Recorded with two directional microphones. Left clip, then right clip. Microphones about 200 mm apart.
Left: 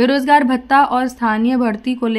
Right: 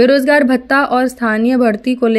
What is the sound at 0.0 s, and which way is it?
Speech, 15° right (ahead or behind).